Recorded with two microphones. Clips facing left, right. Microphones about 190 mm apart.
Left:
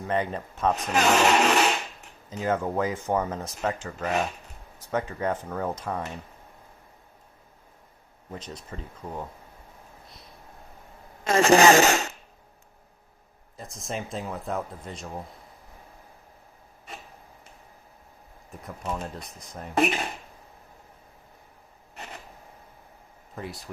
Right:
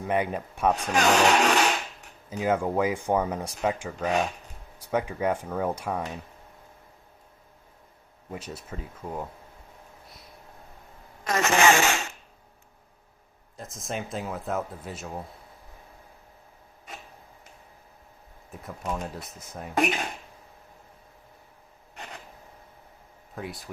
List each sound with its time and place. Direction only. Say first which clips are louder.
0.1 s speech: right 1 dB; 10° right (ahead or behind)
0.9 s speech: left 1 dB; 5° left (ahead or behind)
2.3 s speech: right 1 dB; 10° right (ahead or behind)
8.3 s speech: right 1 dB; 10° right (ahead or behind)
11.2 s speech: left 5 dB; 30° left (ahead or behind)
13.6 s a man's voice: even; centre (ahead or behind)
18.6 s a man's voice: even; centre (ahead or behind)
23.3 s a man's voice: even; centre (ahead or behind)